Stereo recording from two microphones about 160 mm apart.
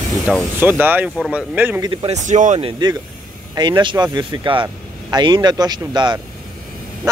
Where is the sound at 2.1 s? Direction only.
50° right (ahead or behind).